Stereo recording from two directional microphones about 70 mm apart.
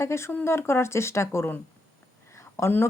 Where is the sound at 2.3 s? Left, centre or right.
Left.